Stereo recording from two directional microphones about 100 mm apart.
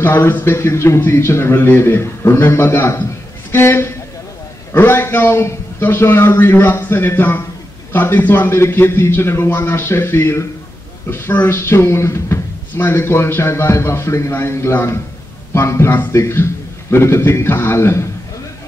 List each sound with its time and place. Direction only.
0.0 s speech: 20° left (ahead or behind)